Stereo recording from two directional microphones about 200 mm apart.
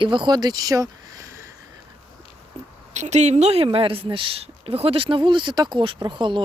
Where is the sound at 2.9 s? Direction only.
35° right (ahead or behind).